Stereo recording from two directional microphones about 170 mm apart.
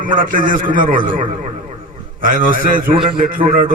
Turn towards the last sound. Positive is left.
turn(degrees=-30)  # may be behind; listen again after turning